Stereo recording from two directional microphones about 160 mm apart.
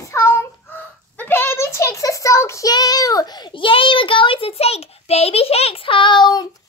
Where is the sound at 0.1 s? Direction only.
15° left (ahead or behind).